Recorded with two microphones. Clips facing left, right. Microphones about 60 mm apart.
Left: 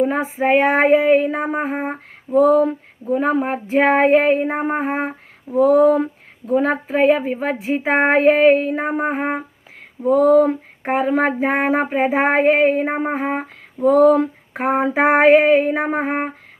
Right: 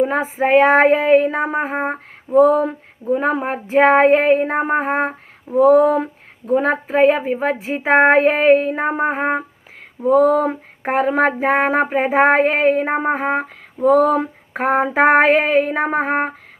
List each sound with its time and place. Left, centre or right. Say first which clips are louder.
0.4 s female singing: right 3 dB; centre
1.5 s a woman's voice: right 1 dB; centre
1.9 s a sound: right 2 dB; centre
3.4 s female singing: right 2 dB; centre
4.5 s a woman's voice: right 3 dB; centre
4.9 s a sound: right 3 dB; right
5.5 s a sound: right 1 dB; right
6.5 s a woman's voice: right 1 dB; centre
7.4 s female singing: right 1 dB; centre
12.8 s a woman's voice: right 2 dB; centre
13.2 s female singing: right 3 dB; centre